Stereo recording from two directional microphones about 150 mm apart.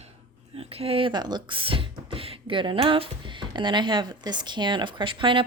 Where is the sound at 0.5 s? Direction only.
40° right (ahead or behind).